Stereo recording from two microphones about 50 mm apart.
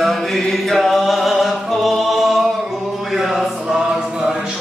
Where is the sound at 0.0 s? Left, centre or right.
Centre.